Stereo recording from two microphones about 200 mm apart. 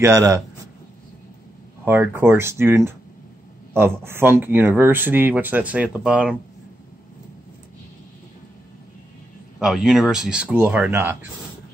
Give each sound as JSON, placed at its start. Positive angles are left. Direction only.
{"t": 0.0, "sound": "speech", "side_deg": -15}
{"t": 1.9, "sound": "speech", "side_deg": -10}
{"t": 9.6, "sound": "speech", "side_deg": 0}